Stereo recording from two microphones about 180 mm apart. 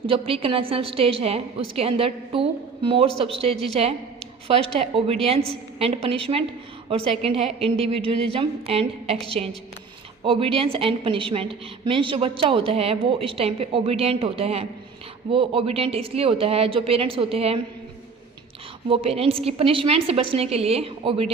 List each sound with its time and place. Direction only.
0.1 s a woman's voice: 30° right (ahead or behind)
18.9 s a woman's voice: 30° right (ahead or behind)